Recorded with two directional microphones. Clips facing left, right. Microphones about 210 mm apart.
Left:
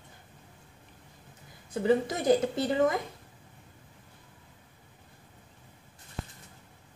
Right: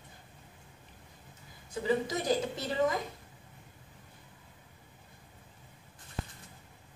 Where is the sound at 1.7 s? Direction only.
55° left (ahead or behind).